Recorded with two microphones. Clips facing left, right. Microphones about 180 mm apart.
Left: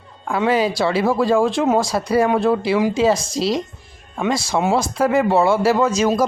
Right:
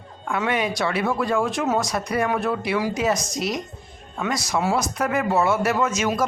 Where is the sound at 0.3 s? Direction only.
30° left (ahead or behind).